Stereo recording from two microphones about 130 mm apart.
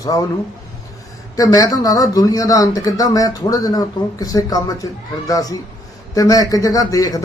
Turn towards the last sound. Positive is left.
turn(degrees=30)  # may be behind; listen again after turning